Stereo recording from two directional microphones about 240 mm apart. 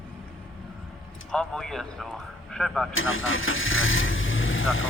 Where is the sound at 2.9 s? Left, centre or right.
Left.